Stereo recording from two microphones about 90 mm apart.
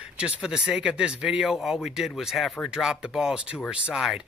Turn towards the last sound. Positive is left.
turn(degrees=-10)  # may be behind; listen again after turning